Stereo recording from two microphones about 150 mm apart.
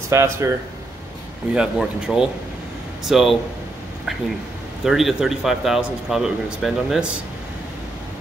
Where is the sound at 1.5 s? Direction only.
5° right (ahead or behind).